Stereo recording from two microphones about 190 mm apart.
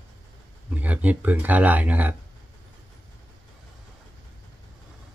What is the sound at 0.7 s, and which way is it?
Speech, 10° right (ahead or behind).